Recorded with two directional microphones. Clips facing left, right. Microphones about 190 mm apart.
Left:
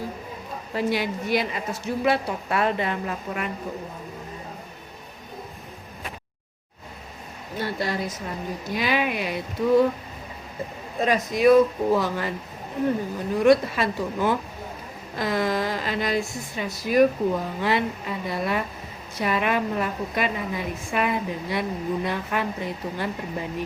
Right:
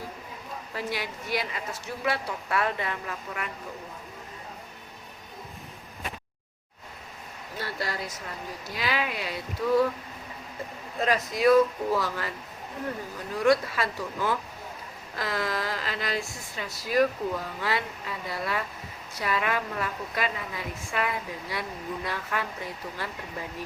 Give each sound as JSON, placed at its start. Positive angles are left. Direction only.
{"t": 0.7, "sound": "a woman's voice", "side_deg": 25}
{"t": 7.5, "sound": "a woman's voice", "side_deg": 20}
{"t": 11.0, "sound": "a woman's voice", "side_deg": 20}